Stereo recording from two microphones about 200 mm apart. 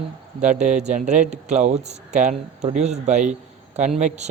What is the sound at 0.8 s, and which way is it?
A man's voice, 35° right (ahead or behind).